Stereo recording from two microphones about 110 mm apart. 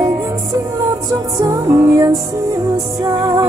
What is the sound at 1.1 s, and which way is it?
Music, 30° right (ahead or behind).